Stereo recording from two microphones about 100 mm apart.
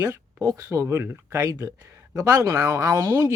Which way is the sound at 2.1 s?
35° right (ahead or behind).